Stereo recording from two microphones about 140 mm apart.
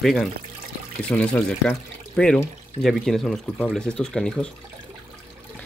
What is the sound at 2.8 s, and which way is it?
Speech, centre (ahead or behind).